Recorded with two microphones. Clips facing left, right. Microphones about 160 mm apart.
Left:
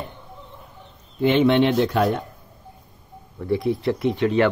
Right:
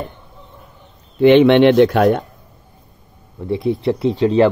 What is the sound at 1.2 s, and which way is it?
Speech, 75° right (ahead or behind).